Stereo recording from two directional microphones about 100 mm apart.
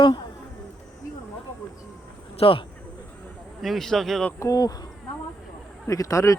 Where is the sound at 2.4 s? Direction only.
60° left (ahead or behind).